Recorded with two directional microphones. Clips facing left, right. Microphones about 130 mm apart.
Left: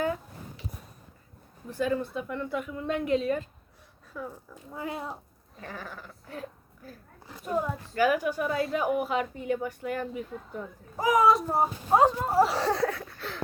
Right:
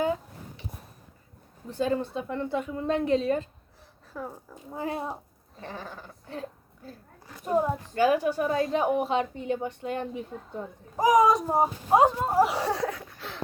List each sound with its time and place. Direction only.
0.0 s a sound: 20° right (ahead or behind)
1.7 s a woman's voice: 30° right (ahead or behind)
10.9 s speech: 15° right (ahead or behind)